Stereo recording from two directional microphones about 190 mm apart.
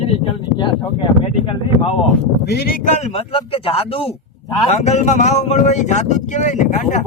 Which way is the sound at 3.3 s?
30° left (ahead or behind).